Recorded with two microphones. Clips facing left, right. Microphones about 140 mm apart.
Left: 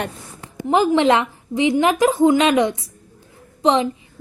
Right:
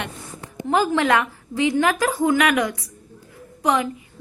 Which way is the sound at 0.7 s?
20° left (ahead or behind).